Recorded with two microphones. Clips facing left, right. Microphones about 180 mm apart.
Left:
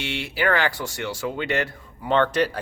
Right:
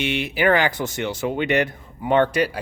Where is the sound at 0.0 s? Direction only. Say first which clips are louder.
Right 4 dB; 20° right (ahead or behind).